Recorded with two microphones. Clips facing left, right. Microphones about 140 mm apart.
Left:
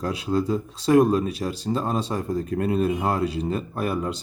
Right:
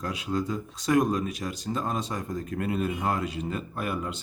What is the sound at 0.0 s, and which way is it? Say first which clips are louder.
Speech: left 5 dB; 35° left (ahead or behind).